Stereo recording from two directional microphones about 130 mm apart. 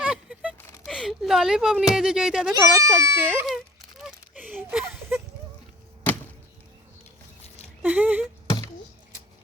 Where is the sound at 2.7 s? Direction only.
25° right (ahead or behind).